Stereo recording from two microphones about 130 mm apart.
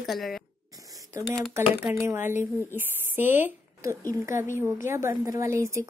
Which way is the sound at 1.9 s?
20° right (ahead or behind).